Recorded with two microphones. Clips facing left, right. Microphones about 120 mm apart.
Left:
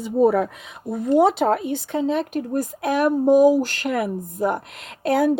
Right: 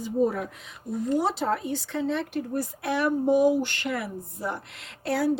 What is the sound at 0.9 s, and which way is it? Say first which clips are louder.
Speech: left 8 dB; 60° left (ahead or behind).